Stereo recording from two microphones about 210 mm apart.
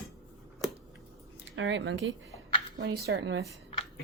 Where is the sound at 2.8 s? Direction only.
50° right (ahead or behind).